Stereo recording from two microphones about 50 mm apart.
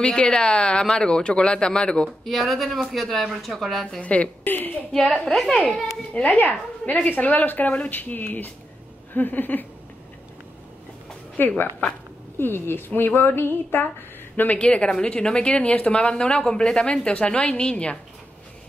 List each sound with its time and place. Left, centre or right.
0.0 s speech: centre
2.2 s speech: centre
4.0 s a woman's voice: left
4.5 s speech: left
5.1 s speech: centre
6.1 s speech: left
11.3 s a woman's voice: left
14.3 s speech: left
14.6 s a woman's voice: centre